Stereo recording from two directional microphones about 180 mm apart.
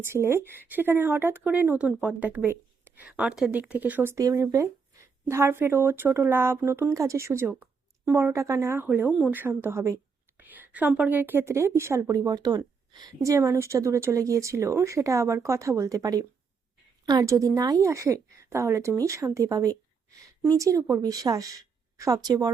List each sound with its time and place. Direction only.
0.0 s a woman's voice: 15° right (ahead or behind)